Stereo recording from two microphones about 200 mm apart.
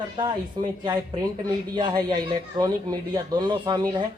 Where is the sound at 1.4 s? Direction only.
20° right (ahead or behind).